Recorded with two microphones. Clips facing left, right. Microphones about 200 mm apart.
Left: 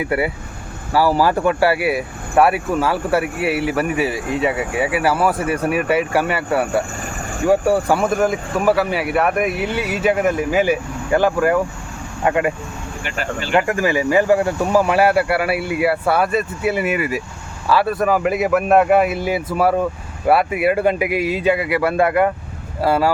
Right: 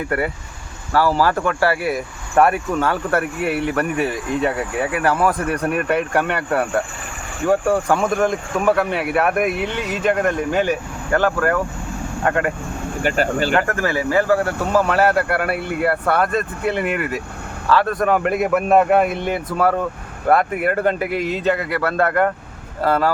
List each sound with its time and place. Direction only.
0.0 s speech: 10° left (ahead or behind)
13.0 s speech: 45° right (ahead or behind)
13.6 s speech: 15° left (ahead or behind)